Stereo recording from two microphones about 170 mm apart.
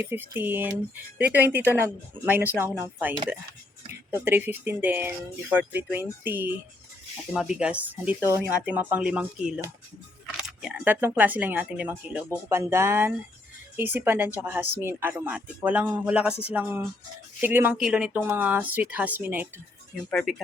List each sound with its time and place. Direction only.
0.0 s speech: 10° right (ahead or behind)
20.1 s speech: 5° left (ahead or behind)